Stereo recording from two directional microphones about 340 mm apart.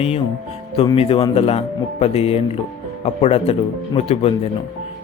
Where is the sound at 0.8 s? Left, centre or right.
Centre.